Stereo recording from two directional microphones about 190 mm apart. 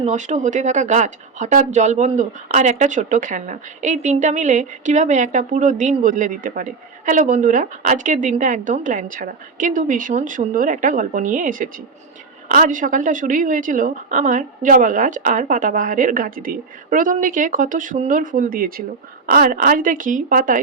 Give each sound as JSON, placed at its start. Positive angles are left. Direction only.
{"t": 0.0, "sound": "a woman's voice", "side_deg": -40}